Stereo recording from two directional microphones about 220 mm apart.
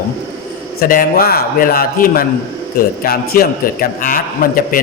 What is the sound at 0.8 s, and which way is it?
A man's voice, 40° left (ahead or behind).